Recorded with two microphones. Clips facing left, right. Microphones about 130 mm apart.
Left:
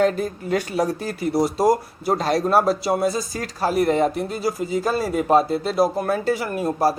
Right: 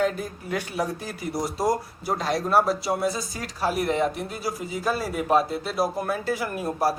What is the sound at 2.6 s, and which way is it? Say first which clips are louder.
Speech: left 4 dB; 30° left (ahead or behind).